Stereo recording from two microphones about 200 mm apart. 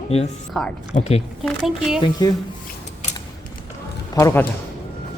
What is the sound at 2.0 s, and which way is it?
Speech, 20° left (ahead or behind).